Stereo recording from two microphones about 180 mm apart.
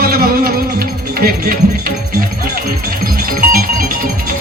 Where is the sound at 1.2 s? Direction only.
55° right (ahead or behind).